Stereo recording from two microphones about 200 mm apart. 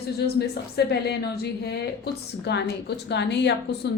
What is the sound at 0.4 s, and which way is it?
A woman's voice, 55° left (ahead or behind).